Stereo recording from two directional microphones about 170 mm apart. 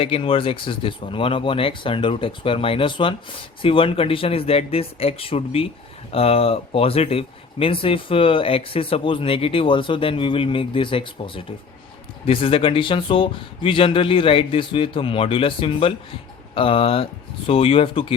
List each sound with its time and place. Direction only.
0.0 s speech: 30° left (ahead or behind)